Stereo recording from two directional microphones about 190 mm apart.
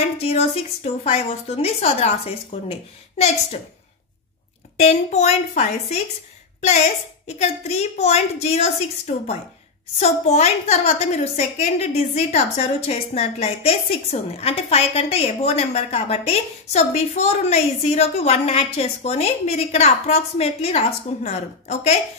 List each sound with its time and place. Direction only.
0.2 s a woman's voice: 30° left (ahead or behind)
4.7 s a woman's voice: 35° left (ahead or behind)
7.2 s a woman's voice: 35° left (ahead or behind)